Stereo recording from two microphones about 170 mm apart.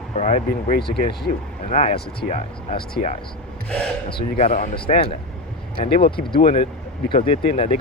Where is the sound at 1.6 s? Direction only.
45° left (ahead or behind).